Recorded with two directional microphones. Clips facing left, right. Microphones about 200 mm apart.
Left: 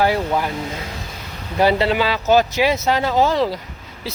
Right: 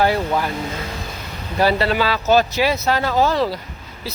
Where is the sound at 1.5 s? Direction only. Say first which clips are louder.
Left 1 dB; 20° left (ahead or behind).